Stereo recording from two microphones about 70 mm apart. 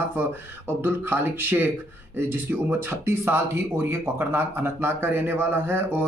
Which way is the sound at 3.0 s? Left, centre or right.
Right.